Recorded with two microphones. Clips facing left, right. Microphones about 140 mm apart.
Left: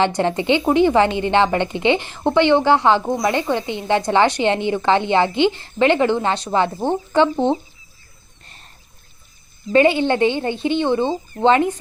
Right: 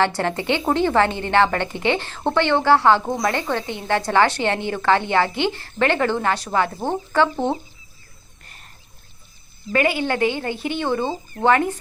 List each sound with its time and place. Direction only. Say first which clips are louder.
0.0 s a woman's voice: left 3 dB; 20° left (ahead or behind)
9.7 s a woman's voice: left 6 dB; 25° left (ahead or behind)